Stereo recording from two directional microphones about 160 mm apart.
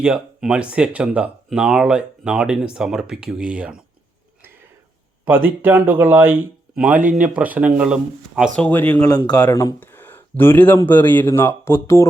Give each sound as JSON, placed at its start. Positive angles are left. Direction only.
{"t": 0.0, "sound": "speech", "side_deg": -5}
{"t": 5.5, "sound": "speech", "side_deg": -10}
{"t": 8.5, "sound": "speech", "side_deg": 10}
{"t": 9.0, "sound": "a man's voice", "side_deg": 25}
{"t": 9.3, "sound": "speech", "side_deg": 10}